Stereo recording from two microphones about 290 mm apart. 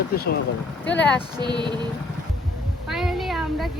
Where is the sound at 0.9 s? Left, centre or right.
Centre.